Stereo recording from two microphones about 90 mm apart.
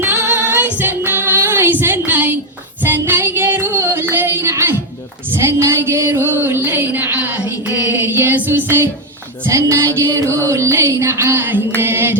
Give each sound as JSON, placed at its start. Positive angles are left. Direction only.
{"t": 0.0, "sound": "female singing", "side_deg": -25}
{"t": 3.0, "sound": "music", "side_deg": -25}
{"t": 5.3, "sound": "a sound", "side_deg": -30}
{"t": 8.1, "sound": "music", "side_deg": -25}